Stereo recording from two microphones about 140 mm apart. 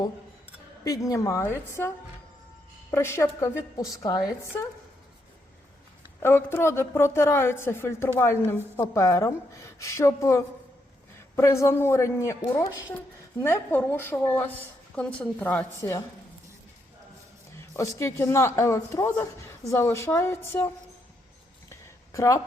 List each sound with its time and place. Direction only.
0.9 s speech: 25° left (ahead or behind)
2.9 s speech: 20° left (ahead or behind)
6.2 s a woman's voice: 20° left (ahead or behind)
17.7 s speech: 20° left (ahead or behind)
21.7 s a sound: 20° left (ahead or behind)